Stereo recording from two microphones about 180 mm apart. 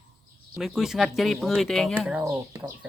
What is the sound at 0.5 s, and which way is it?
Speech, centre (ahead or behind).